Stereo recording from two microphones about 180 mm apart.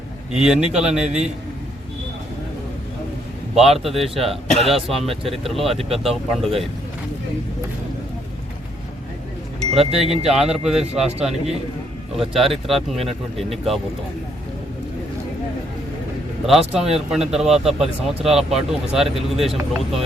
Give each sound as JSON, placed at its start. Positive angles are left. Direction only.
{"t": 0.3, "sound": "speech", "side_deg": -5}
{"t": 3.5, "sound": "speech", "side_deg": 0}
{"t": 9.7, "sound": "speech", "side_deg": -35}
{"t": 10.1, "sound": "speech", "side_deg": 0}
{"t": 12.4, "sound": "speech", "side_deg": 0}
{"t": 16.5, "sound": "speech", "side_deg": 0}